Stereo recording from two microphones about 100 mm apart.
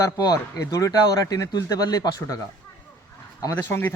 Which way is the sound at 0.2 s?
40° left (ahead or behind).